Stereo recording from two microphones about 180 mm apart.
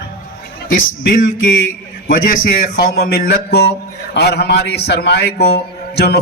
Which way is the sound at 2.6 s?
60° left (ahead or behind).